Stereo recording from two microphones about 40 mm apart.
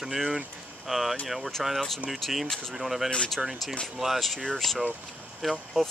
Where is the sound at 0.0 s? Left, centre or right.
Centre.